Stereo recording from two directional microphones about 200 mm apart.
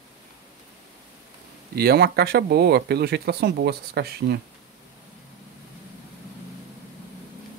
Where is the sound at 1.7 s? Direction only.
50° right (ahead or behind).